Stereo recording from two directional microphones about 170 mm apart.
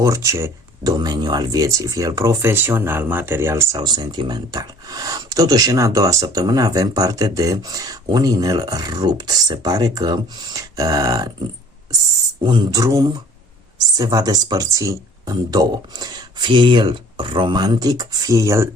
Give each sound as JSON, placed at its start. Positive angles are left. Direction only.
{"t": 0.0, "sound": "speech", "side_deg": -20}
{"t": 12.4, "sound": "speech", "side_deg": -25}